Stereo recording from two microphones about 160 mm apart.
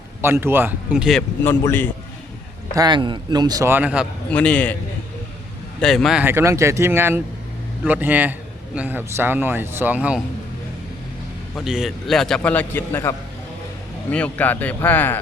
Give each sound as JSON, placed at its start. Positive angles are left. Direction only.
{"t": 0.2, "sound": "a man's voice", "side_deg": -15}
{"t": 1.5, "sound": "speech", "side_deg": 15}
{"t": 2.7, "sound": "a man's voice", "side_deg": -25}
{"t": 4.3, "sound": "speech", "side_deg": 10}
{"t": 5.8, "sound": "a man's voice", "side_deg": 0}
{"t": 6.2, "sound": "a man's voice", "side_deg": -15}
{"t": 11.6, "sound": "a man's voice", "side_deg": -5}